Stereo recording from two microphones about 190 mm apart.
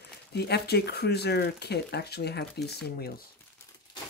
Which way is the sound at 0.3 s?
60° left (ahead or behind).